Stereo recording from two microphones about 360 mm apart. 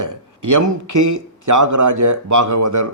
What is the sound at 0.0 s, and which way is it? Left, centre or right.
Speech, right.